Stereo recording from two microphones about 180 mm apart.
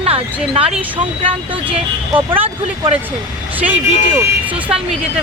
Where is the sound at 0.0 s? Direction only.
30° right (ahead or behind).